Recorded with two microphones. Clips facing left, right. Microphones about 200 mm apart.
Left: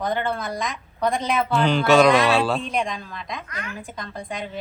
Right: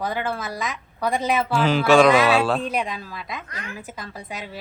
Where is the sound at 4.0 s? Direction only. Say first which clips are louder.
Left 3 dB; 5° right (ahead or behind).